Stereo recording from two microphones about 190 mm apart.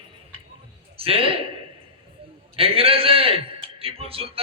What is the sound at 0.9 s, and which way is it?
Speech, 30° right (ahead or behind).